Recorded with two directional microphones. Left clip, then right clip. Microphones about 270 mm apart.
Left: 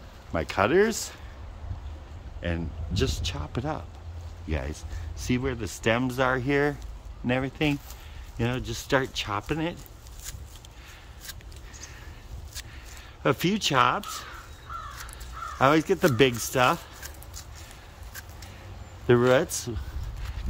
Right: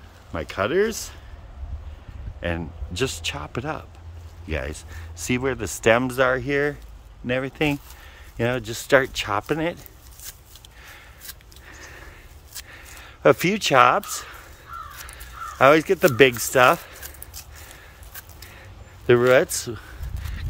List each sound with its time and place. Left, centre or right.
0.3 s speech: centre
2.4 s speech: centre
11.8 s a sound: centre
15.0 s fowl: centre
16.2 s speech: centre
19.0 s speech: centre